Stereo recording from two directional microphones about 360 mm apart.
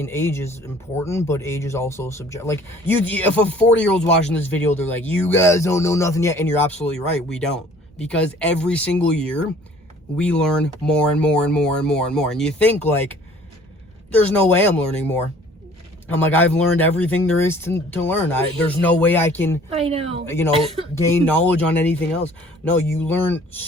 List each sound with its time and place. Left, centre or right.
0.0 s speech: centre
19.7 s speech: centre
20.2 s speech: centre